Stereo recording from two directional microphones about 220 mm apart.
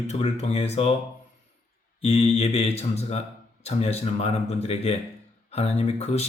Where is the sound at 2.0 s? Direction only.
30° left (ahead or behind).